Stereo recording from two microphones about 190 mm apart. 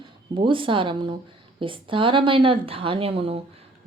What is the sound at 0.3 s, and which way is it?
A woman's voice, 25° right (ahead or behind).